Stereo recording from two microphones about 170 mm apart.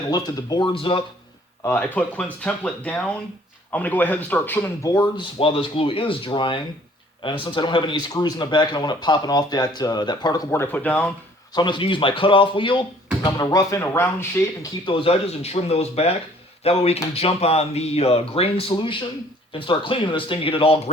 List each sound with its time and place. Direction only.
0.1 s speech: 20° left (ahead or behind)
1.6 s speech: 10° left (ahead or behind)
10.5 s speech: 10° left (ahead or behind)
11.5 s speech: 25° left (ahead or behind)
14.8 s speech: 30° left (ahead or behind)